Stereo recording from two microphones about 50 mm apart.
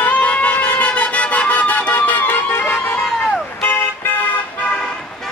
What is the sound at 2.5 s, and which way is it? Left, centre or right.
Music, left.